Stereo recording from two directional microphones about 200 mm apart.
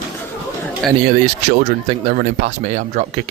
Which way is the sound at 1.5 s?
35° right (ahead or behind).